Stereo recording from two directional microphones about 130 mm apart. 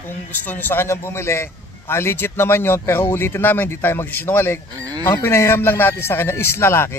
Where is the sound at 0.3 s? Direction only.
15° left (ahead or behind).